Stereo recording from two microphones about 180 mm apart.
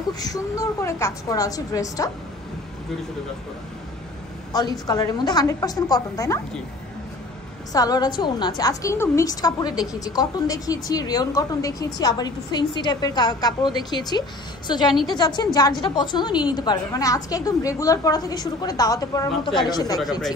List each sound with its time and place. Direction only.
0.2 s a woman's voice: 20° left (ahead or behind)
4.5 s a woman's voice: 20° left (ahead or behind)
7.7 s a woman's voice: 20° left (ahead or behind)